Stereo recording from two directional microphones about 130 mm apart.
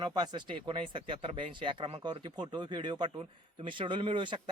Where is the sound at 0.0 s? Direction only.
35° right (ahead or behind).